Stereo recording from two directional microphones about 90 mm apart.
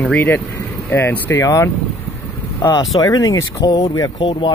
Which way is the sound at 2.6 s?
50° left (ahead or behind).